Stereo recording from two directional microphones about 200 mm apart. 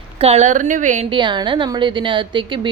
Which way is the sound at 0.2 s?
30° right (ahead or behind).